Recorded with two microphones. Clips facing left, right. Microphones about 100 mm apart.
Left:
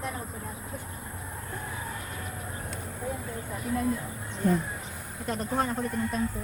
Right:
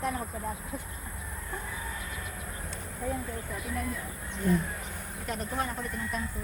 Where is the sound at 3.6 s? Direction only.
30° left (ahead or behind).